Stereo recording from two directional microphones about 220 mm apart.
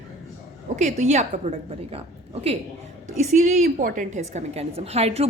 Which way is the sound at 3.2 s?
30° right (ahead or behind).